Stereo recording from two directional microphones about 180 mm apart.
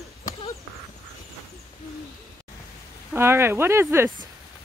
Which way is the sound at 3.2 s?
15° right (ahead or behind).